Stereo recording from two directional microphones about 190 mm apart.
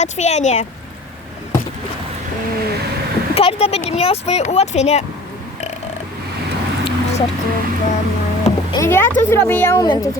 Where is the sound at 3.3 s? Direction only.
30° left (ahead or behind).